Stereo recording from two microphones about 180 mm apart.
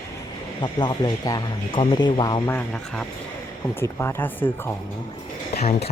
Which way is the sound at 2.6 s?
5° left (ahead or behind).